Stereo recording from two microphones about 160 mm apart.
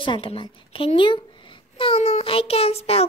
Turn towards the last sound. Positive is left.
turn(degrees=40)  # may be behind; listen again after turning